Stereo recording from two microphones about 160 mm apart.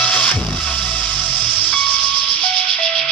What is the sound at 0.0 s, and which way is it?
Music, 5° left (ahead or behind).